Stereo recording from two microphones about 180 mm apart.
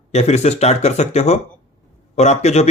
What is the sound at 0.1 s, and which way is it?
Speech, 40° left (ahead or behind).